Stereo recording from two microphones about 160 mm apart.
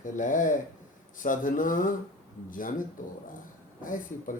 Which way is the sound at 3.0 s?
55° left (ahead or behind).